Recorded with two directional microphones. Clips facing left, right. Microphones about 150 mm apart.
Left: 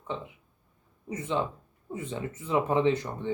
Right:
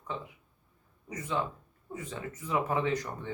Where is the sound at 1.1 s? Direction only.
25° left (ahead or behind).